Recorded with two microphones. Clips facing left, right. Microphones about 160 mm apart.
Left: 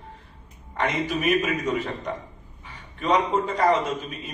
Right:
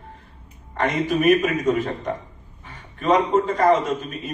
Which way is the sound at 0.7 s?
45° right (ahead or behind).